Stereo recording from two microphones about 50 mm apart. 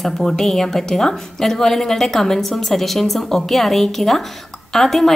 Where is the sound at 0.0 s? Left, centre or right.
Centre.